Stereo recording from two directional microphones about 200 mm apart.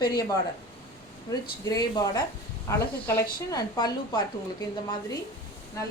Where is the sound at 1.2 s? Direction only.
20° left (ahead or behind).